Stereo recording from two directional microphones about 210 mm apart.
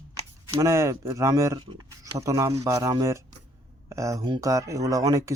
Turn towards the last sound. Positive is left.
turn(degrees=-15)  # may be behind; listen again after turning